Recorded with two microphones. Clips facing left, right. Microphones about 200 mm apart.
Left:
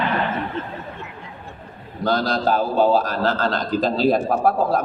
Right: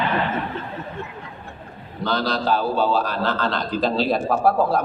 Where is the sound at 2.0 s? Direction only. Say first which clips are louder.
Left 3 dB; 45° left (ahead or behind).